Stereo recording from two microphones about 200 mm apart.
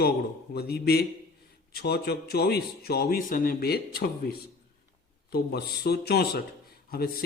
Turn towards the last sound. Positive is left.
turn(degrees=50)  # may be behind; listen again after turning